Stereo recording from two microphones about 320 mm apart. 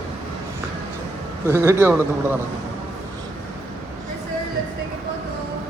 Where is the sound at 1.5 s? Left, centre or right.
Centre.